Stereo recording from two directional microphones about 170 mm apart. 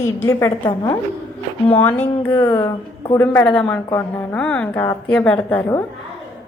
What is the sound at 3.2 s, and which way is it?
A woman's voice, 10° left (ahead or behind).